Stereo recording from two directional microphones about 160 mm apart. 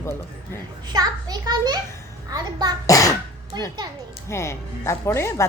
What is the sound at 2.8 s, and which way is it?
Speech, 20° left (ahead or behind).